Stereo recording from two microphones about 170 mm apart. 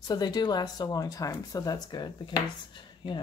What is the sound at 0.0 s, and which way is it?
Speech, 25° left (ahead or behind).